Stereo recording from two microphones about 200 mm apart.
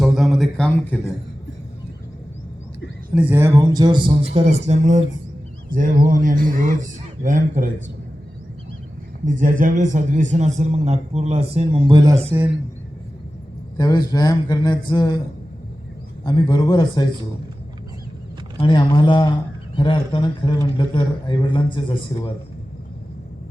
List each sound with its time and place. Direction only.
0.0 s a sound: centre (ahead or behind)
3.2 s speech: 10° right (ahead or behind)
4.4 s a man's voice: 30° right (ahead or behind)
9.2 s a man's voice: 40° right (ahead or behind); by 12.5 s 15° right (ahead or behind)
13.7 s a man's voice: 20° left (ahead or behind)
16.2 s a man's voice: 25° left (ahead or behind)
18.6 s a man's voice: 25° left (ahead or behind)